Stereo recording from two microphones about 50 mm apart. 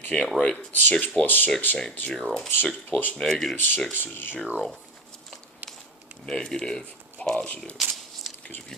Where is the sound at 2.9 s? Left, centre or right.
Left.